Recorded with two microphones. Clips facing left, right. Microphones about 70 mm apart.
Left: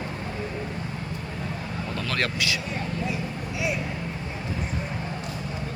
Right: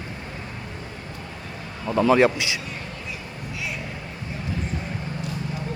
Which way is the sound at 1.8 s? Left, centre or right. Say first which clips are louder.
Right 13 dB; centre.